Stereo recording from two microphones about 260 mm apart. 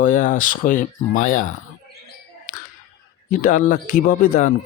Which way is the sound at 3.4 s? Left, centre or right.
Left.